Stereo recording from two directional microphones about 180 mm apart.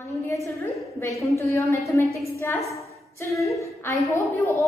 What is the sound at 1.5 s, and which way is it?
A woman's voice, 15° left (ahead or behind).